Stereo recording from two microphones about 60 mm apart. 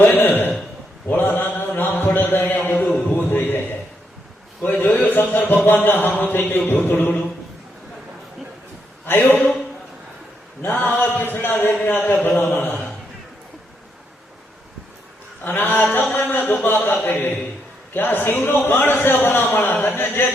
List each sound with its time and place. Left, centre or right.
0.0 s a sound: left
1.0 s mantra: left
2.3 s speech: left
4.6 s speech: left
9.0 s speech: left
10.6 s speech: left
15.4 s speech: left